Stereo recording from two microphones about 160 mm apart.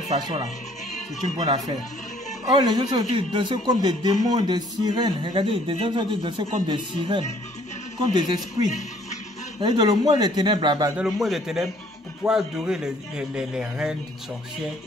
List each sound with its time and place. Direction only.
2.5 s speech: 25° right (ahead or behind)
8.6 s a sound: 50° left (ahead or behind)
9.6 s speech: 25° right (ahead or behind)
11.0 s a man's voice: centre (ahead or behind)